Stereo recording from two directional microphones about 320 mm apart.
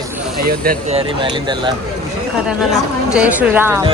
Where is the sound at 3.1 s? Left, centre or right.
Centre.